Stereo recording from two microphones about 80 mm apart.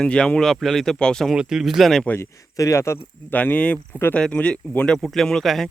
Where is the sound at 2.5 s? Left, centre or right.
Left.